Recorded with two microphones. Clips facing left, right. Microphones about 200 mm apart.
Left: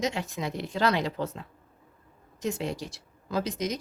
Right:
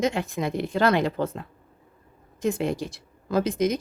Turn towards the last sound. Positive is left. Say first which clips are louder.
# right 7 dB
turn(degrees=-55)  # may be behind; listen again after turning